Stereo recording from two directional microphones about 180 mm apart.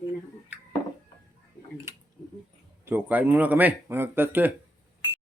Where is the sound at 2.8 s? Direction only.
10° right (ahead or behind).